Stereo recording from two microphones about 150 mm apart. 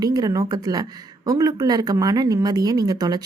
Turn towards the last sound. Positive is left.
turn(degrees=-25)  # may be behind; listen again after turning